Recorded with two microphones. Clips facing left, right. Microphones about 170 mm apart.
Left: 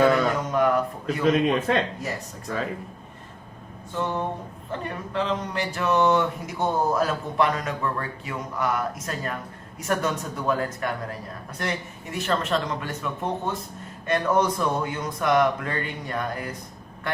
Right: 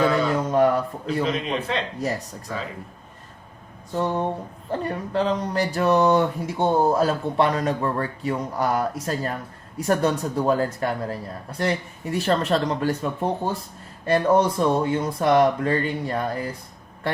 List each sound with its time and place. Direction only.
0.4 s a sound: 30° right (ahead or behind)
1.2 s a man's voice: 50° left (ahead or behind)
3.9 s speech: 35° right (ahead or behind)